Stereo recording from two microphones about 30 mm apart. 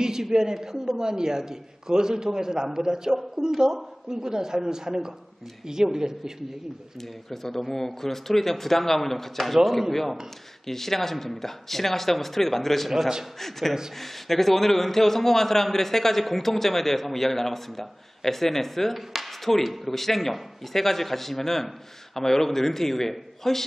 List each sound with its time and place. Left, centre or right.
0.3 s a man's voice: right
7.0 s a man's voice: centre
18.9 s a man's voice: centre